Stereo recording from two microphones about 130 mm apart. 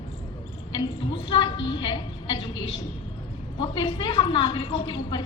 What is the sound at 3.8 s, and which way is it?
A woman's voice, 35° left (ahead or behind).